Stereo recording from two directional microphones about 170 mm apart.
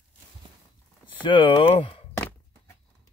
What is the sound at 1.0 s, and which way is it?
Speech, 30° left (ahead or behind).